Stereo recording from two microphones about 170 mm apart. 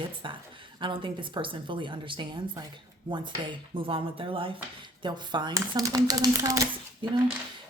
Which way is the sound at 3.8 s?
30° right (ahead or behind).